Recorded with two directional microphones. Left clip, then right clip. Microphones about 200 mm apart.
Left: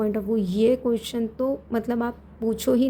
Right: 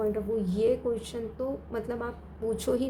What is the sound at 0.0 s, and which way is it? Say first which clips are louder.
A woman's voice: left 4 dB; 45° left (ahead or behind).